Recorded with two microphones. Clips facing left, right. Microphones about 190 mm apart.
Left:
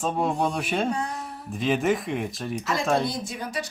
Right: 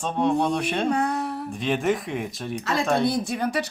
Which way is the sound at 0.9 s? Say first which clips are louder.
Right 5 dB; 65° right (ahead or behind).